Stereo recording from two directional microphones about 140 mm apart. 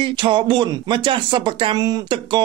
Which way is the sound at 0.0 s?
35° right (ahead or behind).